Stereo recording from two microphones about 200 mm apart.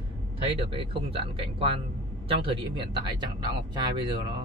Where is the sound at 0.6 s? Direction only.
25° right (ahead or behind).